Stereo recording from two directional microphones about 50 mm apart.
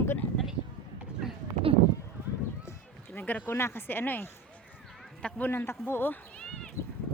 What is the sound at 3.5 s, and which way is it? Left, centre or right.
Speech, left.